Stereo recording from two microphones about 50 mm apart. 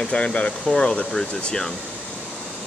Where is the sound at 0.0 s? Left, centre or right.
Left.